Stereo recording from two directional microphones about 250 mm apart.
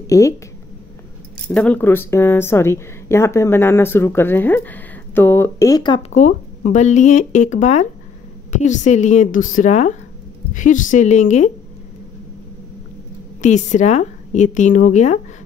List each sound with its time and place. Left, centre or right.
0.0 s speech: centre
1.5 s a woman's voice: centre; by 11.5 s left
13.4 s a woman's voice: left